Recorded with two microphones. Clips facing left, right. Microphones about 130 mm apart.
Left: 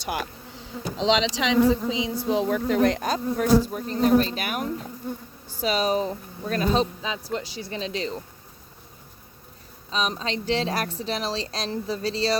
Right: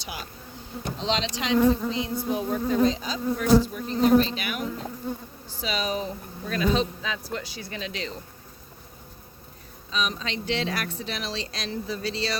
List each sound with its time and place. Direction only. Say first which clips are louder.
0.0 s speech: left 8 dB; 55° left (ahead or behind)
0.9 s speech: left 6 dB; 90° left; by 6.8 s 40° left (ahead or behind)
7.0 s speech: left 2 dB; 25° left (ahead or behind)
9.9 s speech: left 2 dB; 35° left (ahead or behind)